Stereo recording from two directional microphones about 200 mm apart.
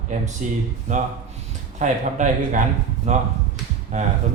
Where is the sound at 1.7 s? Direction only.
40° right (ahead or behind).